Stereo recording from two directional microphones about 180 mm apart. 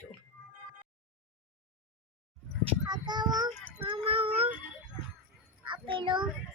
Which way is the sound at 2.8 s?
25° right (ahead or behind).